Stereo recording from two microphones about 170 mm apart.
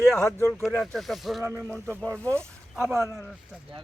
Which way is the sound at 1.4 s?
15° right (ahead or behind).